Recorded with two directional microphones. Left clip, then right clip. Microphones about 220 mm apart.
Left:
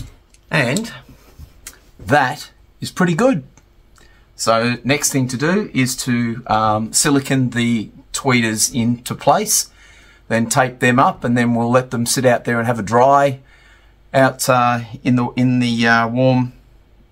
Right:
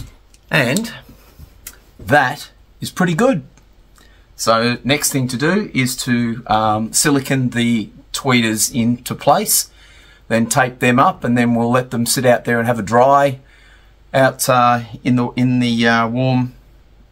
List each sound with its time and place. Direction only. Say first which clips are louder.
0.5 s speech: right 2 dB; 20° right (ahead or behind)
1.6 s a sound: right 1 dB; centre (ahead or behind)
4.4 s speech: right 1 dB; centre (ahead or behind)